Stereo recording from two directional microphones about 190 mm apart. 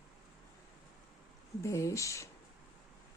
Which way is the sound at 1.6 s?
15° left (ahead or behind).